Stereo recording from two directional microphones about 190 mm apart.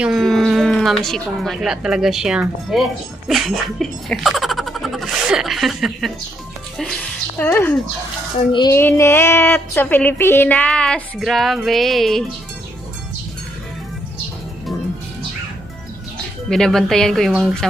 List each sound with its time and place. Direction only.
0.0 s speech: centre (ahead or behind)
8.5 s music: 25° left (ahead or behind)
8.7 s speech: 15° left (ahead or behind)
16.4 s speech: centre (ahead or behind)